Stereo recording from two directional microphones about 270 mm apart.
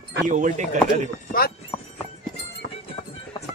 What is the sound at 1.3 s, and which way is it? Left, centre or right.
Clip-clop, left.